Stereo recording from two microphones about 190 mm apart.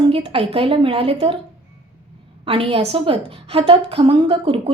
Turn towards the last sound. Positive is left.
turn(degrees=-30)  # may be behind; listen again after turning